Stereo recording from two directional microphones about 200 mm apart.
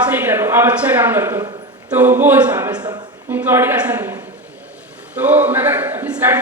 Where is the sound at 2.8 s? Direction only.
20° right (ahead or behind).